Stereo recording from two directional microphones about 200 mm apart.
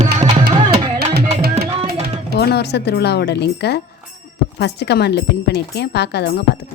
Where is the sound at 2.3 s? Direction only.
55° left (ahead or behind).